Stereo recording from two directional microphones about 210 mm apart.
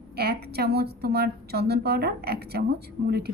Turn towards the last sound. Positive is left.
turn(degrees=-50)  # may be behind; listen again after turning